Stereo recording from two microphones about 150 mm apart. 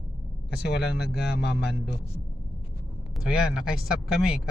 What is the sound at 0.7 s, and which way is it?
Speech, 90° left.